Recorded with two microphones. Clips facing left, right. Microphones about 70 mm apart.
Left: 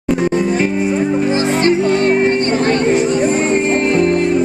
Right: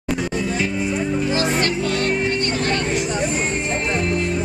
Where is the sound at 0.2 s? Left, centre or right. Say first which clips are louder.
Left 9 dB; left.